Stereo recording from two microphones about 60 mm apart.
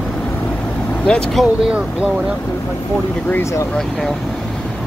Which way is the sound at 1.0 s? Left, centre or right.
Centre.